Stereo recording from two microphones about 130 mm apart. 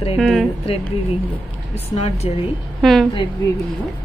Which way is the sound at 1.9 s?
55° left (ahead or behind).